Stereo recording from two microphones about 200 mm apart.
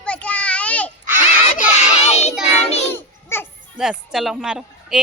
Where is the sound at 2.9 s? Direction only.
10° left (ahead or behind).